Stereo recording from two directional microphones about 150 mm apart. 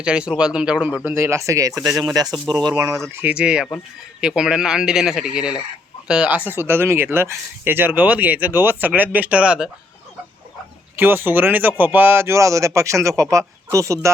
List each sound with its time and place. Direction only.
0.0 s speech: 5° right (ahead or behind)
3.2 s speech: 10° right (ahead or behind)
10.9 s speech: 15° right (ahead or behind)